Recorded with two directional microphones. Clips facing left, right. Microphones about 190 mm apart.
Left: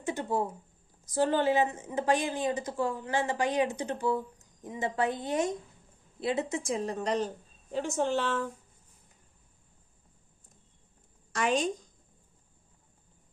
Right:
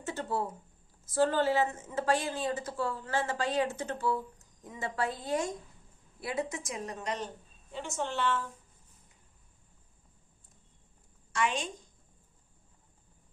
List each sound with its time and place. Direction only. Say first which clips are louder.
0.0 s a woman's voice: left 3 dB; 15° left (ahead or behind); by 8.2 s 40° left (ahead or behind)
11.3 s a woman's voice: left 4 dB; 40° left (ahead or behind)